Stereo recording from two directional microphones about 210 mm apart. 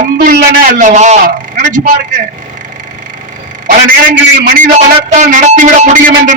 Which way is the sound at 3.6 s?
40° right (ahead or behind).